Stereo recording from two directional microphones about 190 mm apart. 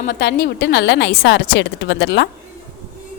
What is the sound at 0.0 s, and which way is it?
A woman's voice, 60° left (ahead or behind).